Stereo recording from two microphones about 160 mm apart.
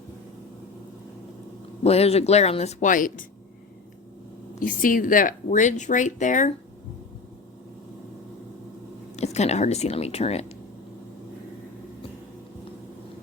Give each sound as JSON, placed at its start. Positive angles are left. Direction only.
{"t": 1.8, "sound": "speech", "side_deg": 40}
{"t": 4.6, "sound": "speech", "side_deg": 55}
{"t": 9.1, "sound": "speech", "side_deg": 45}